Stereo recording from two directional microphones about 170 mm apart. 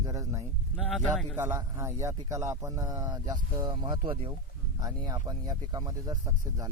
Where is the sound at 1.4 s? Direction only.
15° right (ahead or behind).